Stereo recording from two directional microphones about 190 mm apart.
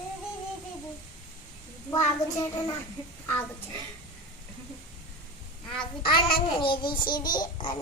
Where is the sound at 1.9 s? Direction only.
15° left (ahead or behind).